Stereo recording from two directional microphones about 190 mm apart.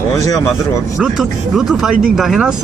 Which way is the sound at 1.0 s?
Centre (ahead or behind).